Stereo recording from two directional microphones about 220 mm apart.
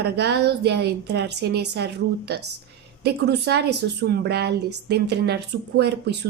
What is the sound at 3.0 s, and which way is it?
A woman's voice, 50° right (ahead or behind).